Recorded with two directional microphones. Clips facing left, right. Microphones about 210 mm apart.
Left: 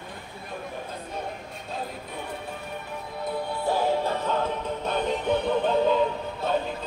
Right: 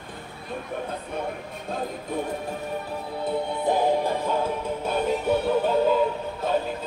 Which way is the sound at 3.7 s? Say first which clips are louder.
Right 2 dB; 15° right (ahead or behind).